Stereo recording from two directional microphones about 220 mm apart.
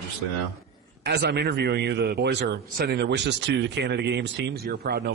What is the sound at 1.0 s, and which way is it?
A man's voice, 50° right (ahead or behind).